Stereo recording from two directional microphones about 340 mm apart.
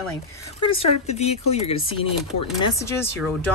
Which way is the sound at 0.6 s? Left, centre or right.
Centre.